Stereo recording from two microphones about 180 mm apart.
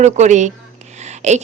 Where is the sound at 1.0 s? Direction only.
40° right (ahead or behind).